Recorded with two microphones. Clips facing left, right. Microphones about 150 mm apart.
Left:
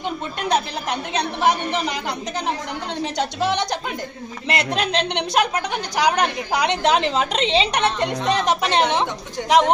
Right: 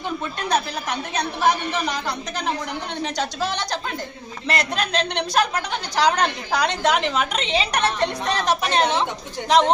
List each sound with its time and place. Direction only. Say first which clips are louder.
0.3 s a woman's voice: left 2 dB; 25° left (ahead or behind)
3.2 s a woman's voice: left 5 dB; 20° left (ahead or behind)